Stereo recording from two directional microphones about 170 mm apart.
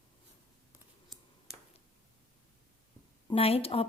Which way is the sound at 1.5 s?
5° right (ahead or behind).